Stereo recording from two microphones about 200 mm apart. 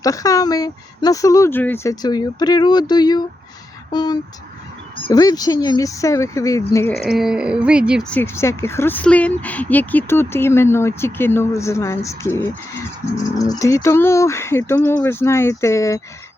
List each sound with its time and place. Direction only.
0.0 s speech: 15° left (ahead or behind)
6.9 s speech: centre (ahead or behind)
8.1 s speech: 10° left (ahead or behind)